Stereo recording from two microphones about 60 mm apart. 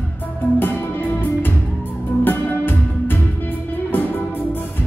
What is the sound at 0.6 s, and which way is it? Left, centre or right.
Music, left.